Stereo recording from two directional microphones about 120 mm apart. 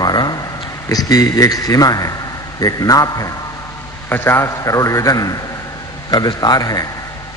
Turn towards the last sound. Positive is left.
turn(degrees=30)  # may be behind; listen again after turning